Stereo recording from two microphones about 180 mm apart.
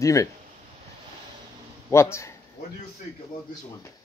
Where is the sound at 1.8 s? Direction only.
15° left (ahead or behind).